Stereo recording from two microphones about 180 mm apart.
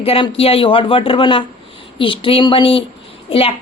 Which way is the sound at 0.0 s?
35° left (ahead or behind).